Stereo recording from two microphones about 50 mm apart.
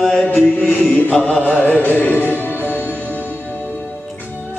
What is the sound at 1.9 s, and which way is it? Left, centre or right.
Music, left.